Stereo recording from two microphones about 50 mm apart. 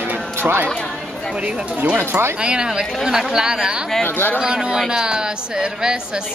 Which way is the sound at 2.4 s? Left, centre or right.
Centre.